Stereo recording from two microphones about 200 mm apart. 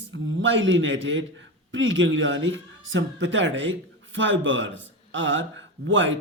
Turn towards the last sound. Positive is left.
turn(degrees=-70)  # may be behind; listen again after turning